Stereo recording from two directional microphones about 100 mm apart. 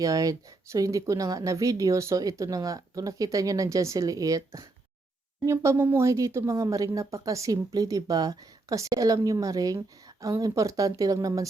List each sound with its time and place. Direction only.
0.0 s speech: 35° right (ahead or behind)